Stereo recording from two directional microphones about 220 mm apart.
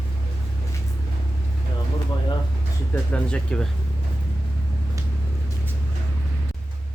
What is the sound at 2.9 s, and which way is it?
Speech, 5° left (ahead or behind).